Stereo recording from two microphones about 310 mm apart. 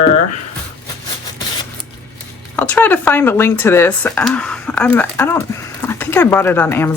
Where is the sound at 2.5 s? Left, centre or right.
Centre.